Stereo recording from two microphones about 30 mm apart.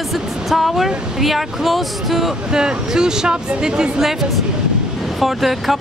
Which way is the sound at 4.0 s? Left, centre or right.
Centre.